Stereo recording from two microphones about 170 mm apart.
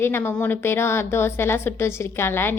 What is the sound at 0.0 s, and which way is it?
A woman's voice, 15° left (ahead or behind).